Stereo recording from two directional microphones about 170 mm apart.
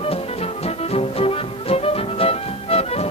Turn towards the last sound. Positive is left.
turn(degrees=35)  # may be behind; listen again after turning